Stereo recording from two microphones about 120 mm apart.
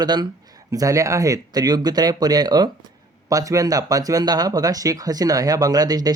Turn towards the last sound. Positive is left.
turn(degrees=-35)  # may be behind; listen again after turning